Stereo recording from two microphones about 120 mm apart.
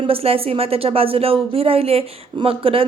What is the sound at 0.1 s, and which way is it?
Speech, 55° right (ahead or behind).